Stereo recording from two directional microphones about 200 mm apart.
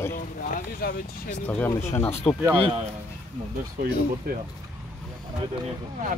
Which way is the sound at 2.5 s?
30° right (ahead or behind).